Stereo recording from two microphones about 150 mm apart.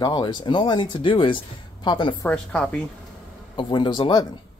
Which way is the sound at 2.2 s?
5° left (ahead or behind).